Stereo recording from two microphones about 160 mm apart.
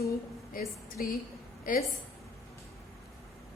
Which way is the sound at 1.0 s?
60° left (ahead or behind).